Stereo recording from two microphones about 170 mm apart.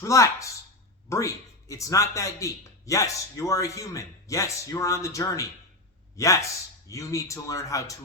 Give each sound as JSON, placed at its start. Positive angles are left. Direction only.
{"t": 0.0, "sound": "speech", "side_deg": 20}